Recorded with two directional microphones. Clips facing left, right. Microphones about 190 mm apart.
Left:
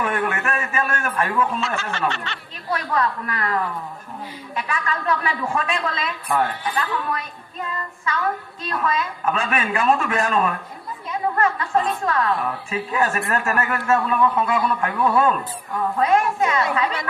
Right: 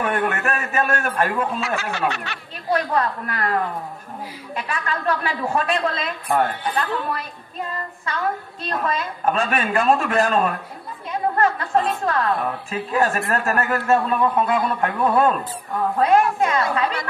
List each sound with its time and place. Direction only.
0.0 s a man's voice: 35° right (ahead or behind)
1.6 s snicker: 10° right (ahead or behind)
2.9 s a woman's voice: 40° right (ahead or behind)
8.6 s a woman's voice: 35° right (ahead or behind)